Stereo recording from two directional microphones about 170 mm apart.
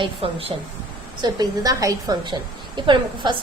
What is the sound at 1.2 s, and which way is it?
A woman's voice, 25° right (ahead or behind).